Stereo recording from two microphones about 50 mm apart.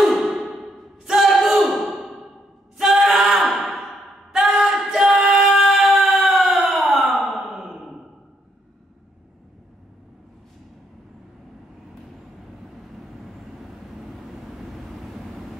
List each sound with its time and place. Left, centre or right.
0.0 s a sound: centre
4.3 s singing: centre
7.1 s sigh: centre
14.1 s vehicle: centre